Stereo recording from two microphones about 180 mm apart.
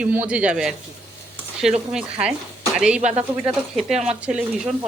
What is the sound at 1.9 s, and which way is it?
Speech, 5° right (ahead or behind).